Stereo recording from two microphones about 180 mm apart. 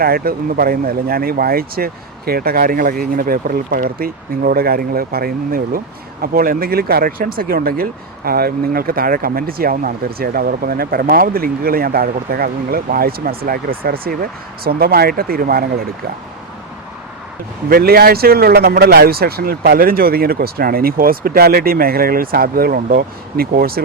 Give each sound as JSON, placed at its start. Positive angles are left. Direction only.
{"t": 0.0, "sound": "speech", "side_deg": -55}
{"t": 17.7, "sound": "speech", "side_deg": -60}